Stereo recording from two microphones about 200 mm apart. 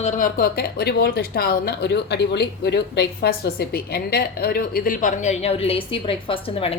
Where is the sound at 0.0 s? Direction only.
40° left (ahead or behind).